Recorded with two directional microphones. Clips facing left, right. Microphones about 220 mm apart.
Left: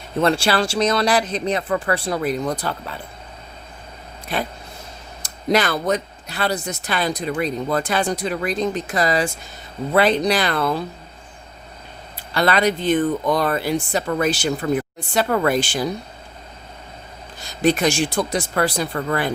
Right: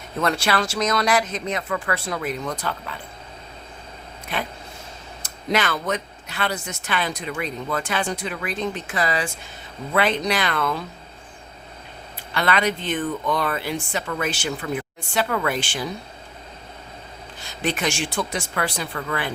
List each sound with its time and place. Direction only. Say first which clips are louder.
0.2 s speech: left 4 dB; 30° left (ahead or behind)
4.3 s speech: left 4 dB; 35° left (ahead or behind)
12.3 s speech: left 4 dB; 35° left (ahead or behind)
17.4 s speech: left 7 dB; 40° left (ahead or behind)